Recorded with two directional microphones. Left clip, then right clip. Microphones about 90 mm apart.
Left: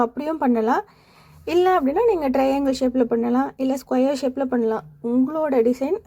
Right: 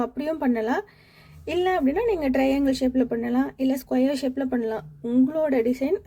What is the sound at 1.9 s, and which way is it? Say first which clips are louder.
Speech: left 5 dB; 20° left (ahead or behind).